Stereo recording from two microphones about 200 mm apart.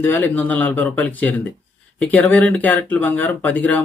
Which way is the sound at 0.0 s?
10° left (ahead or behind).